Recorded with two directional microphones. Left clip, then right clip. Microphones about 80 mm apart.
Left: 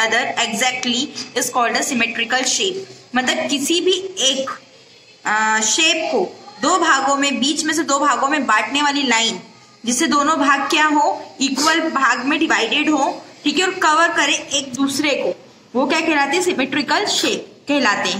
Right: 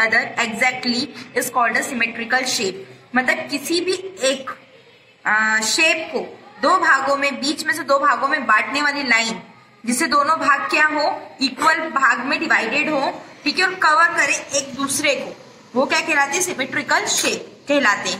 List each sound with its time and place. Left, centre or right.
0.0 s a woman's voice: left
5.2 s a woman's voice: left
7.2 s music: left
7.6 s a woman's voice: left
10.4 s music: left
11.4 s a woman's voice: left